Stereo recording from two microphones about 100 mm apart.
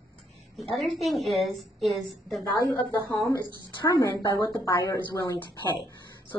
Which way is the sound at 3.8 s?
40° left (ahead or behind).